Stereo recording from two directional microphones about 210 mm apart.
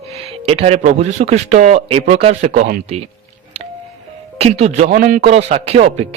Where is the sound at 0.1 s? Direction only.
30° right (ahead or behind).